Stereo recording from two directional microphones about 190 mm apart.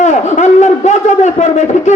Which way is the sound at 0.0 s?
40° left (ahead or behind).